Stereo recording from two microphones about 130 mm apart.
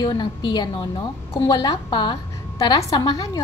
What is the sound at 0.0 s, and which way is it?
A woman's voice, 35° left (ahead or behind).